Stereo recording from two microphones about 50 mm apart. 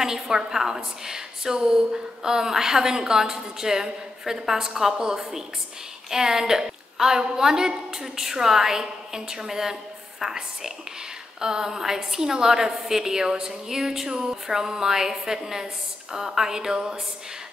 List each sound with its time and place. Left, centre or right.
0.0 s a woman's voice: centre